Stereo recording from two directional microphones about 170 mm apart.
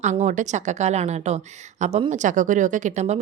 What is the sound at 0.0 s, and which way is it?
Speech, 45° right (ahead or behind).